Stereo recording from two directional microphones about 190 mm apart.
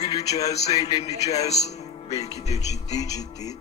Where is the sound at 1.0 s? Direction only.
35° left (ahead or behind).